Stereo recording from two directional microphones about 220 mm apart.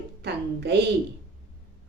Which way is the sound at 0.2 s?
50° right (ahead or behind).